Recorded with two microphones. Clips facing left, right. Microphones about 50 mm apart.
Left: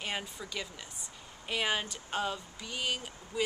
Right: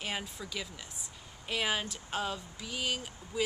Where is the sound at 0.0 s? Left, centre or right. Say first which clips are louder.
Even; centre.